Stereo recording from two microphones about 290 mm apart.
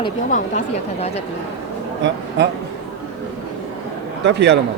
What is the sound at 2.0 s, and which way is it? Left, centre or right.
Speech, right.